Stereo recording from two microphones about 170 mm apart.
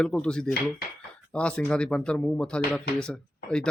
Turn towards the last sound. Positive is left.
turn(degrees=5)  # may be behind; listen again after turning